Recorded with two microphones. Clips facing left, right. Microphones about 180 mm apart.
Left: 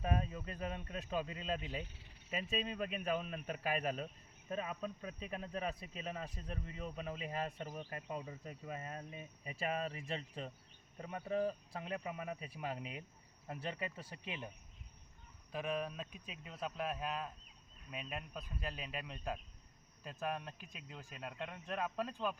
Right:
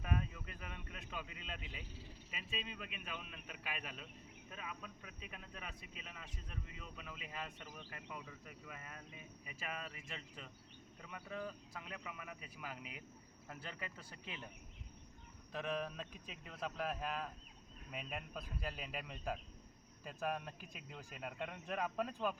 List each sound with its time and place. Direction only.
0.0 s speech: 35° left (ahead or behind); by 14.5 s 20° left (ahead or behind)
15.5 s speech: 5° left (ahead or behind)